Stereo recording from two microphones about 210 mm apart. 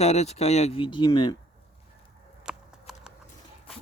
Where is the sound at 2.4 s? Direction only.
5° right (ahead or behind).